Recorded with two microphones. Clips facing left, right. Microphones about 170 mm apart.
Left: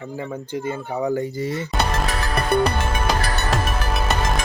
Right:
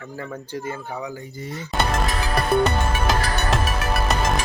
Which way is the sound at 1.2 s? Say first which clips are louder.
Left 8 dB; 85° left.